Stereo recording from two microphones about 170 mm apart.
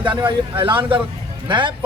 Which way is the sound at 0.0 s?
30° right (ahead or behind).